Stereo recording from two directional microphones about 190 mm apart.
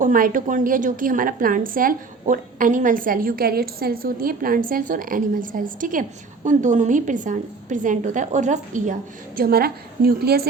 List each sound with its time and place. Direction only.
0.0 s a woman's voice: 45° right (ahead or behind)